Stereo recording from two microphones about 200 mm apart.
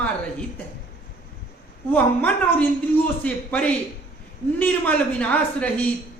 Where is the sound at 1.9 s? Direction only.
10° left (ahead or behind).